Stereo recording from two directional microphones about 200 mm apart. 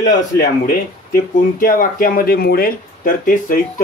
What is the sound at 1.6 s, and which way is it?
Speech, 45° left (ahead or behind).